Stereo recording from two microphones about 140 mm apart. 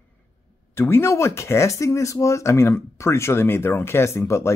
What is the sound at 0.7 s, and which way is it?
Speech, 15° left (ahead or behind).